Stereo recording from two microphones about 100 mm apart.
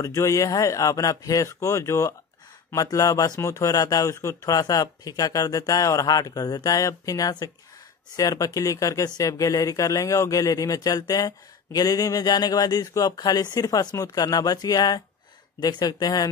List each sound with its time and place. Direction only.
0.0 s speech: 30° left (ahead or behind)